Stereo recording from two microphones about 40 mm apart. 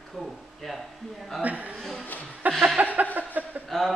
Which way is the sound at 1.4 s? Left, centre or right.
Right.